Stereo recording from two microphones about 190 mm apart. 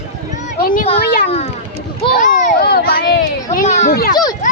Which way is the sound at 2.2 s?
45° left (ahead or behind).